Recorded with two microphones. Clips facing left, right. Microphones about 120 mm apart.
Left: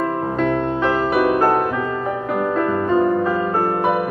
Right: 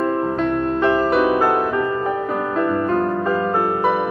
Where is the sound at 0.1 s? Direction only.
10° left (ahead or behind).